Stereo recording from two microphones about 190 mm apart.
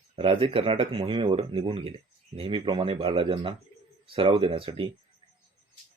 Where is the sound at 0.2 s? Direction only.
30° right (ahead or behind).